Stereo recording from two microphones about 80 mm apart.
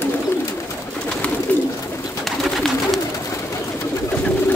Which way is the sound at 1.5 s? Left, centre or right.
Left.